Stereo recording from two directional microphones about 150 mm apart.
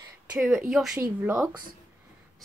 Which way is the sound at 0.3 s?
5° right (ahead or behind).